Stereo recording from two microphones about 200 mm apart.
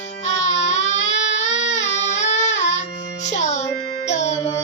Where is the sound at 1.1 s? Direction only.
65° left (ahead or behind).